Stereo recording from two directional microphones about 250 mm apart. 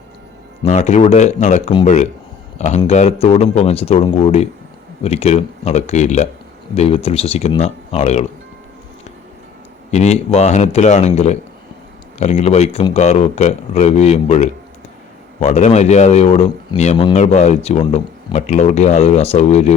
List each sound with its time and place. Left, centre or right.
0.6 s speech: left
9.9 s speech: left